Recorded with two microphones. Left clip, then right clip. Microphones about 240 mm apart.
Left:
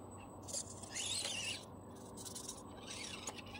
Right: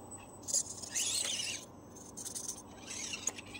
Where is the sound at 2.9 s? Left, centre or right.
Right.